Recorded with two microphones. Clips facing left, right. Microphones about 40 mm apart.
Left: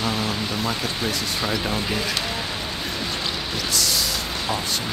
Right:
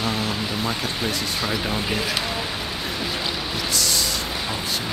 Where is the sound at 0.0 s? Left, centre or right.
Centre.